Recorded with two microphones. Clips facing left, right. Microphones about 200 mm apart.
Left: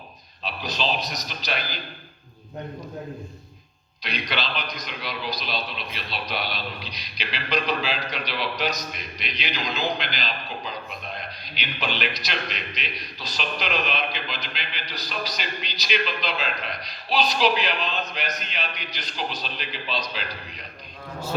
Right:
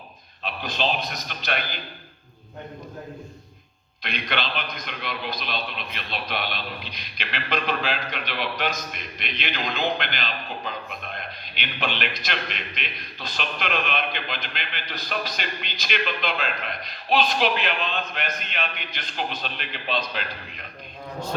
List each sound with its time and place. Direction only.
0.4 s a man's voice: 55° right (ahead or behind)
4.0 s a man's voice: 55° right (ahead or behind)